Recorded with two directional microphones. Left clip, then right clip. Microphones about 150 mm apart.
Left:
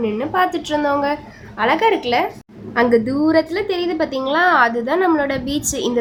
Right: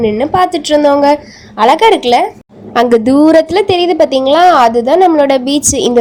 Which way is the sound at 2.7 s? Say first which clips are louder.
Right 8 dB; 50° right (ahead or behind).